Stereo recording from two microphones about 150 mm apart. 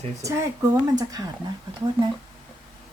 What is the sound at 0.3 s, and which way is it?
Speech, 20° right (ahead or behind).